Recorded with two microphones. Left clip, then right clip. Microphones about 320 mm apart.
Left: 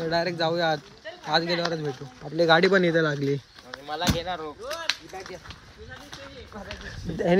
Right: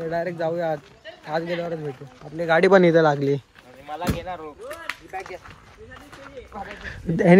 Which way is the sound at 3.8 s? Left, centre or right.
Left.